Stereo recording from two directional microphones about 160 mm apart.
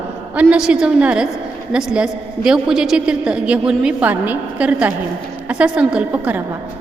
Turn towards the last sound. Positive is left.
turn(degrees=-10)  # may be behind; listen again after turning